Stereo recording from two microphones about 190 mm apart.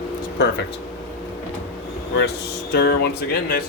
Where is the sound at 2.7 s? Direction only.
60° left (ahead or behind).